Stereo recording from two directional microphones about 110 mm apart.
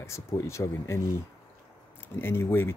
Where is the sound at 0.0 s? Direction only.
25° left (ahead or behind).